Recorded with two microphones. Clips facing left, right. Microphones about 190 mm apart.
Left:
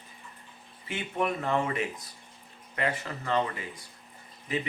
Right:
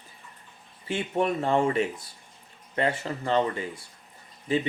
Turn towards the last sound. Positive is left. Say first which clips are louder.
# right 6 dB
turn(degrees=-30)  # may be behind; listen again after turning